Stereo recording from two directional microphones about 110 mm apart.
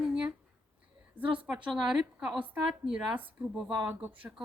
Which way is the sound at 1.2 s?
50° right (ahead or behind).